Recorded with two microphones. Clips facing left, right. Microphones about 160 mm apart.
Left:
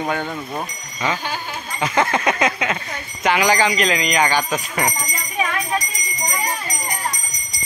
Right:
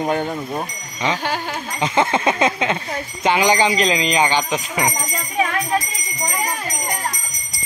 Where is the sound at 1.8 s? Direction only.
25° right (ahead or behind).